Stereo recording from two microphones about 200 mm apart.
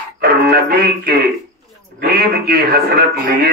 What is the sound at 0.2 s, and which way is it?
Music, 50° right (ahead or behind).